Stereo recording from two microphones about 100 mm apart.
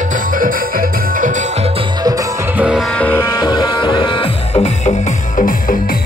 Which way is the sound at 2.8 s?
15° left (ahead or behind).